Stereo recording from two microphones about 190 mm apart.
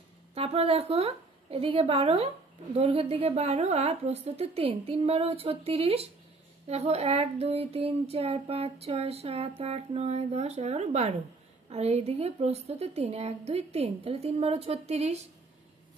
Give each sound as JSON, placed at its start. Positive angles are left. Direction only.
{"t": 0.3, "sound": "a woman's voice", "side_deg": -30}